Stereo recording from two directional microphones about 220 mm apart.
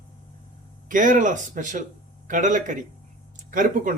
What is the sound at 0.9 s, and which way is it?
A man's voice, 35° right (ahead or behind).